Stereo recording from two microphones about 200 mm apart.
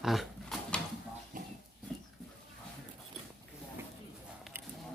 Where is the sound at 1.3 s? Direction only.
40° right (ahead or behind).